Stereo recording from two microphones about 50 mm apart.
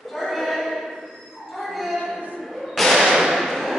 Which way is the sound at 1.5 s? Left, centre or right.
Centre.